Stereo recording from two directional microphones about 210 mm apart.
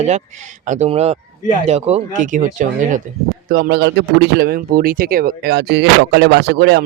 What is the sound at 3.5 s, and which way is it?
A man's voice, 50° right (ahead or behind).